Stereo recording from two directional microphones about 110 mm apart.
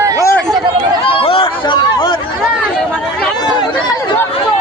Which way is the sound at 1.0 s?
55° left (ahead or behind).